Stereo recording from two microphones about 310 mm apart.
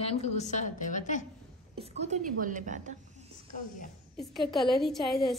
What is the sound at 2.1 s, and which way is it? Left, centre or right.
Speech, right.